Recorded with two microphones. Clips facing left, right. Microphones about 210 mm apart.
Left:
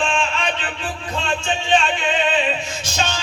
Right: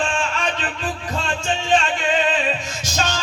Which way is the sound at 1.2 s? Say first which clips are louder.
Left 2 dB; 40° right (ahead or behind).